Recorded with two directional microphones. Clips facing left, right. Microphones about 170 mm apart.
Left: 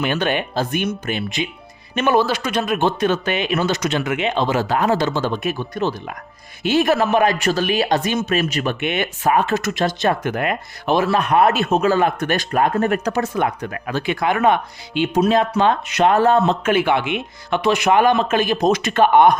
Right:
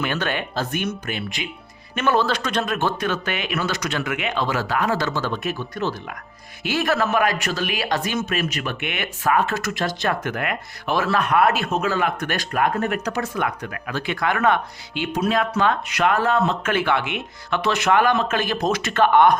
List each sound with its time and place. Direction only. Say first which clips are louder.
0.0 s speech: left 4 dB; 20° left (ahead or behind)
16.6 s speech: left 4 dB; 15° left (ahead or behind)